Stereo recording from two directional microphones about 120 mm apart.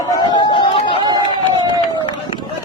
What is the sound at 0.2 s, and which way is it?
Chatter, 40° left (ahead or behind).